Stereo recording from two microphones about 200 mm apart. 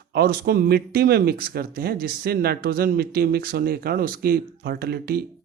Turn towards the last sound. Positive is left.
turn(degrees=-50)  # may be behind; listen again after turning